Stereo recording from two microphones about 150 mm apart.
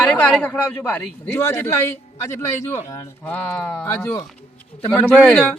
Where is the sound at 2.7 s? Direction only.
15° left (ahead or behind).